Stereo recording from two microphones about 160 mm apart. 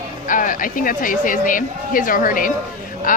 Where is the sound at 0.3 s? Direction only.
55° left (ahead or behind).